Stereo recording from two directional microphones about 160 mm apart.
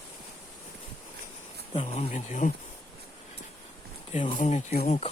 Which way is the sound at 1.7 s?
40° left (ahead or behind).